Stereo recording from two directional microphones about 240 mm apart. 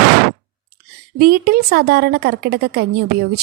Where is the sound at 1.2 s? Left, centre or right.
Right.